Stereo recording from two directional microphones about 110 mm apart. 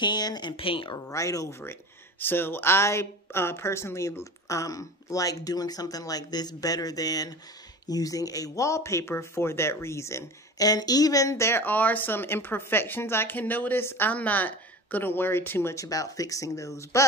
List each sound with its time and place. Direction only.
0.0 s speech: 40° left (ahead or behind)
1.1 s speech: 30° left (ahead or behind)
1.6 s speech: 20° left (ahead or behind)